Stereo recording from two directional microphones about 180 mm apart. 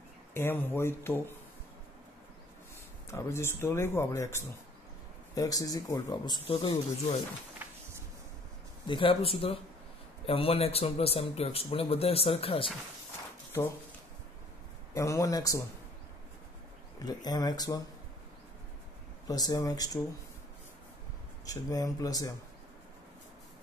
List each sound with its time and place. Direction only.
0.3 s speech: 10° left (ahead or behind)
3.1 s speech: 15° left (ahead or behind)
7.6 s a sound: 10° right (ahead or behind)
8.8 s a man's voice: 30° left (ahead or behind)
13.5 s speech: 15° left (ahead or behind)
15.0 s speech: 15° left (ahead or behind)
17.0 s speech: 20° left (ahead or behind)
19.2 s speech: 20° left (ahead or behind)
21.5 s speech: 20° left (ahead or behind)